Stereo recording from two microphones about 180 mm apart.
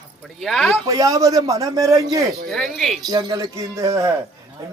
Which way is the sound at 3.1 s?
20° right (ahead or behind).